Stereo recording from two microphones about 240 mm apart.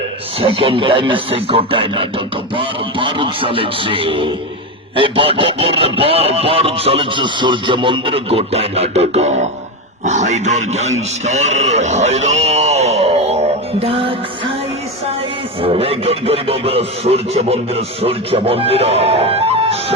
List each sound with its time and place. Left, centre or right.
0.3 s a man's voice: right
15.6 s speech: right